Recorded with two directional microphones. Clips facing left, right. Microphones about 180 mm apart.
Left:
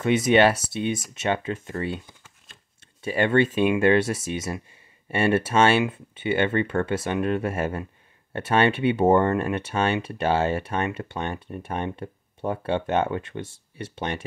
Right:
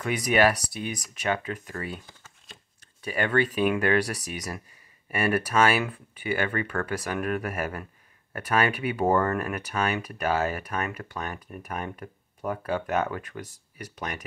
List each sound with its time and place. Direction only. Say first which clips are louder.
0.0 s speech: left 4 dB; 25° left (ahead or behind)
3.0 s speech: left 5 dB; 25° left (ahead or behind)